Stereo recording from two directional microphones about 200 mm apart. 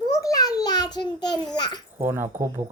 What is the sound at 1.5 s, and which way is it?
Speech, 20° left (ahead or behind).